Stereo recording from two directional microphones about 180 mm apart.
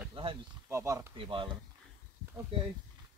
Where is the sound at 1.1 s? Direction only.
30° right (ahead or behind).